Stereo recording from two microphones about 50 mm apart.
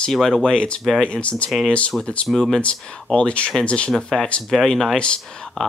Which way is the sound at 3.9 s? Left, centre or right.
Centre.